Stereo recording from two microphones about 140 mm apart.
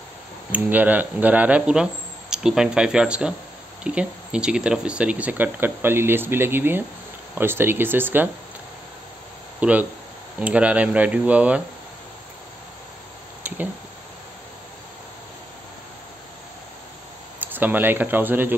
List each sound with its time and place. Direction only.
0.5 s speech: 10° right (ahead or behind)
9.6 s speech: 10° right (ahead or behind)
17.4 s speech: 15° right (ahead or behind)